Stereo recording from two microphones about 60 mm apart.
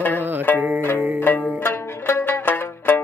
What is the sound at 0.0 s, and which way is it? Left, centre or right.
Music, left.